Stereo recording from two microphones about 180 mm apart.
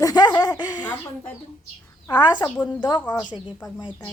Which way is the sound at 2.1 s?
25° left (ahead or behind).